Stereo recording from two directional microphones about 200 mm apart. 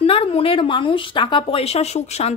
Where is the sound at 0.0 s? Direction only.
30° left (ahead or behind).